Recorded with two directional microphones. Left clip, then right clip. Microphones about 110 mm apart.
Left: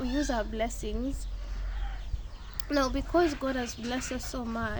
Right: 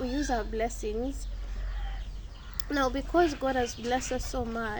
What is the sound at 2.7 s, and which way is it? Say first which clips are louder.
Speech: even; 15° left (ahead or behind).